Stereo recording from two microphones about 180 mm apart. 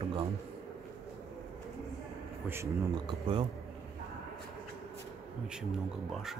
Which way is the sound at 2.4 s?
15° right (ahead or behind).